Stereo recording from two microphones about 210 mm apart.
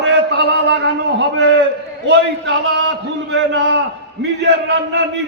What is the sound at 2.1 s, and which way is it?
A man's voice, 65° right (ahead or behind).